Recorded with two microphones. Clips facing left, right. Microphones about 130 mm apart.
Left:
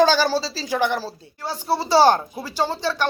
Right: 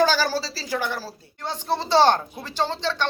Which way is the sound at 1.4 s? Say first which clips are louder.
Left 2 dB; 5° left (ahead or behind).